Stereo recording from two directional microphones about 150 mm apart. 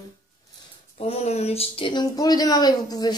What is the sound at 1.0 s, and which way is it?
Speech, 45° left (ahead or behind).